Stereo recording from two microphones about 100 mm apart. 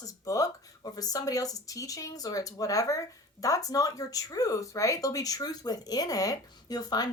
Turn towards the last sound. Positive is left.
turn(degrees=40)  # may be behind; listen again after turning